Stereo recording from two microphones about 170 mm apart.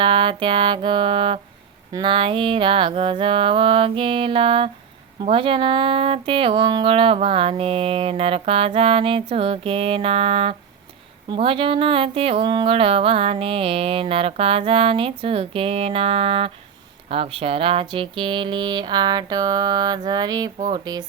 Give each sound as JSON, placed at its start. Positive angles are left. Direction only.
{"t": 0.0, "sound": "speech", "side_deg": -30}